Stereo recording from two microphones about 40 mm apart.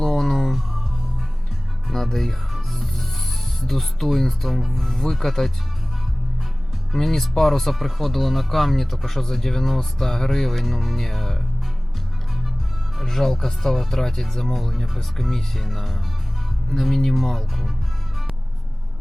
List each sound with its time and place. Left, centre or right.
0.0 s music: centre
1.9 s music: centre
3.6 s speech: centre
6.9 s speech: centre
13.0 s speech: centre
14.5 s speech: centre